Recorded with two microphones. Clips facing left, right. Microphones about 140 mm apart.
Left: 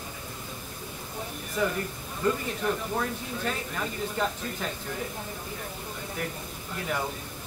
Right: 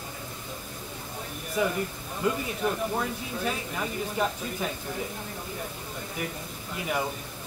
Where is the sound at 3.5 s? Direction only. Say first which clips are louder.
Even; 10° right (ahead or behind).